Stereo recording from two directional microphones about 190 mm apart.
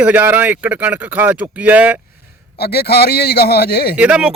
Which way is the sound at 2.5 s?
55° left (ahead or behind).